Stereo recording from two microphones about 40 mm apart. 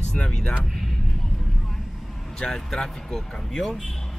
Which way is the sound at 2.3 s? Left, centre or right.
Centre.